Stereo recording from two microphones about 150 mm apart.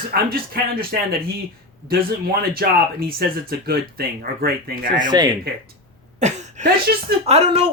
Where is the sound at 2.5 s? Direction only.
85° right.